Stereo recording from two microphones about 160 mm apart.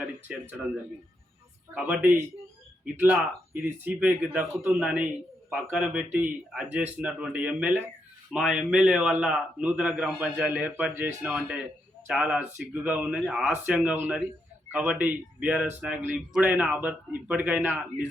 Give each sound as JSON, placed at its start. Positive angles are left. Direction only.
{"t": 0.0, "sound": "speech", "side_deg": -5}
{"t": 1.7, "sound": "a man's voice", "side_deg": -10}
{"t": 3.8, "sound": "a man's voice", "side_deg": -10}